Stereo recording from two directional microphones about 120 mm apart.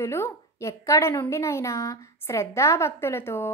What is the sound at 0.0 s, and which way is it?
A woman's voice, 20° left (ahead or behind).